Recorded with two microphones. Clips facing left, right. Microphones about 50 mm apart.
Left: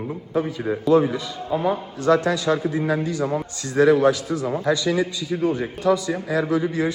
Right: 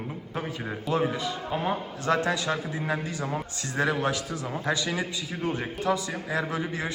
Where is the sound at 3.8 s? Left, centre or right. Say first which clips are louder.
Left 10 dB; right.